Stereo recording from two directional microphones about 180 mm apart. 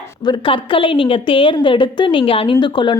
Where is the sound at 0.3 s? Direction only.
30° left (ahead or behind).